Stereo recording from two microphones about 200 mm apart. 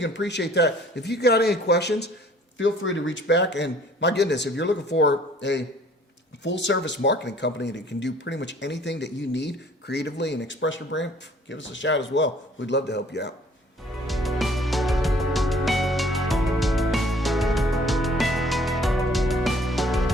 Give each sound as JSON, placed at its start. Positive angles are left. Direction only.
{"t": 0.0, "sound": "speech", "side_deg": 65}
{"t": 2.6, "sound": "speech", "side_deg": 70}
{"t": 14.1, "sound": "music", "side_deg": 0}